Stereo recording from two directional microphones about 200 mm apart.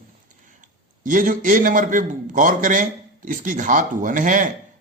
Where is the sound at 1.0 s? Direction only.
40° right (ahead or behind).